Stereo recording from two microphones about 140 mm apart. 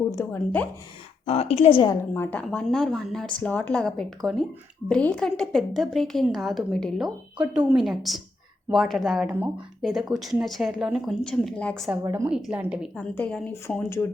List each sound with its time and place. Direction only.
0.3 s speech: 10° left (ahead or behind)
1.2 s a woman's voice: 45° left (ahead or behind)
2.1 s speech: 15° left (ahead or behind)
2.4 s speech: centre (ahead or behind)
7.3 s a woman's voice: 10° right (ahead or behind); by 11.9 s 5° left (ahead or behind)
12.3 s a woman's voice: 5° right (ahead or behind)
13.0 s speech: 10° left (ahead or behind)